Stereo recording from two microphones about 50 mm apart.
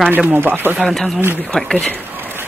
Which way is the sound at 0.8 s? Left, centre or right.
Centre.